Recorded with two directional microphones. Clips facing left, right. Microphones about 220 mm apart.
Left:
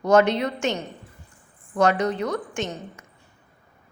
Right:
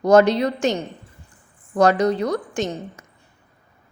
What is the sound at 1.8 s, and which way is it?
A woman's voice, 35° right (ahead or behind).